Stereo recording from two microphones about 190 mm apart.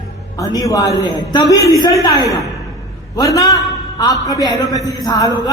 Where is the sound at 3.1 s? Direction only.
20° left (ahead or behind).